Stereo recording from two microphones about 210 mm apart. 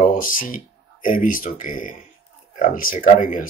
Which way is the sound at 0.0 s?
40° left (ahead or behind).